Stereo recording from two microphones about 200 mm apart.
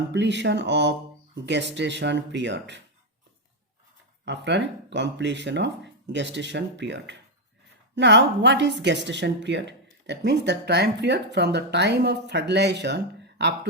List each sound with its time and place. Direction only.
0.1 s a woman's voice: 60° right (ahead or behind)
4.3 s a woman's voice: 60° right (ahead or behind)